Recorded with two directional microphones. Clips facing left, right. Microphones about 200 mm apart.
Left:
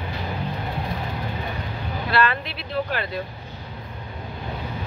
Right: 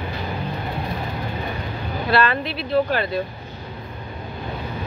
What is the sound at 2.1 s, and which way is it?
Speech, 30° right (ahead or behind).